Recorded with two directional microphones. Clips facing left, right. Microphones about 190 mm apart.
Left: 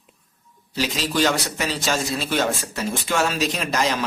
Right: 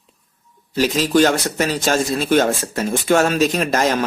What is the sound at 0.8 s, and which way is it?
Speech, 45° right (ahead or behind).